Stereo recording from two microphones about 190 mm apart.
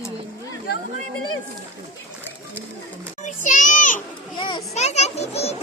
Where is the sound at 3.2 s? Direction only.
40° left (ahead or behind).